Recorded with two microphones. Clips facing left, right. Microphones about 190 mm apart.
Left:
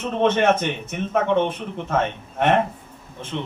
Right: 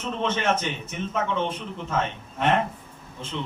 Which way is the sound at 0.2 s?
60° left (ahead or behind).